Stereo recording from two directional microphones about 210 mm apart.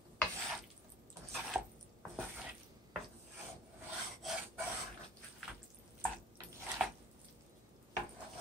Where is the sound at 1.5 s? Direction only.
10° right (ahead or behind).